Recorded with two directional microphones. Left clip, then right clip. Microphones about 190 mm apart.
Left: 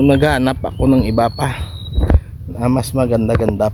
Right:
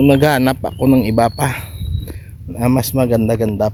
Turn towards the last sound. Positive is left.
turn(degrees=-15)  # may be behind; listen again after turning